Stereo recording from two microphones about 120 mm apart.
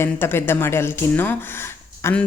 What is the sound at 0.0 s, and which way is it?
A woman's voice, 20° left (ahead or behind).